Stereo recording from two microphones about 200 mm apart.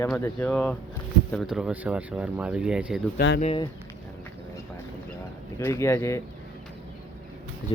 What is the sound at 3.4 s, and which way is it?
Speech, 30° left (ahead or behind).